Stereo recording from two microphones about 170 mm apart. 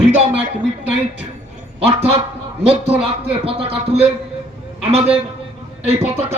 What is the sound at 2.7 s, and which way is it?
Speech, 35° right (ahead or behind).